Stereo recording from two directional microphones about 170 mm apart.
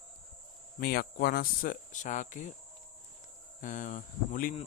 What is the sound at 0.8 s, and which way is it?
Speech, 65° left (ahead or behind).